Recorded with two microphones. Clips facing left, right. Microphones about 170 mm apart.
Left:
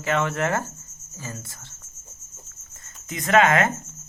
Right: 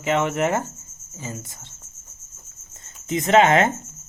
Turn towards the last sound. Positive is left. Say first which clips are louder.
# right 3 dB
turn(degrees=-25)  # may be behind; listen again after turning